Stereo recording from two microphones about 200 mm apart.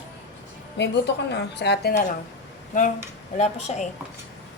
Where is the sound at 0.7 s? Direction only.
60° left (ahead or behind).